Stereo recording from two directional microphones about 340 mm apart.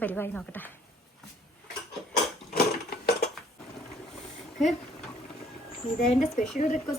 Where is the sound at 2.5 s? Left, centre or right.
Left.